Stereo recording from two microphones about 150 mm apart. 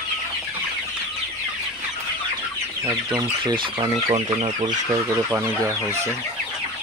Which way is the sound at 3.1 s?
30° right (ahead or behind).